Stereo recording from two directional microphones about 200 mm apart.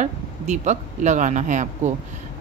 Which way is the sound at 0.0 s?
35° right (ahead or behind).